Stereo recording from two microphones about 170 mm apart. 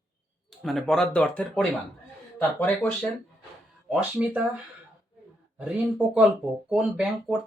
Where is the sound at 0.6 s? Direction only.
Centre (ahead or behind).